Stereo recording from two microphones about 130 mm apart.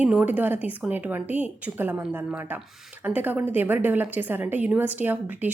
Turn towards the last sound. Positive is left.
turn(degrees=-15)  # may be behind; listen again after turning